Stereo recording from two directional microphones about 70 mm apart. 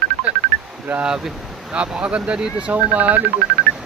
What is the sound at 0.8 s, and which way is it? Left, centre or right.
Speech, right.